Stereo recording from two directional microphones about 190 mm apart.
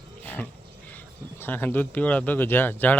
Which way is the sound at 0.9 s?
10° left (ahead or behind).